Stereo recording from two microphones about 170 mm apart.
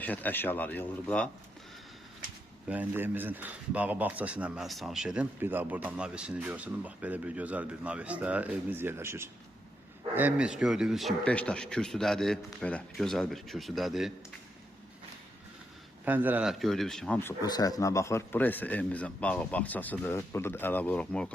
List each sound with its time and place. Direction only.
0.0 s speech: 10° left (ahead or behind)
2.6 s speech: 10° right (ahead or behind)
16.0 s speech: 10° right (ahead or behind)
17.4 s speech: 25° left (ahead or behind); by 21.3 s 5° left (ahead or behind)